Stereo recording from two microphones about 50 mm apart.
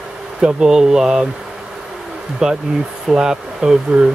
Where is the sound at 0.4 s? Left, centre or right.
Centre.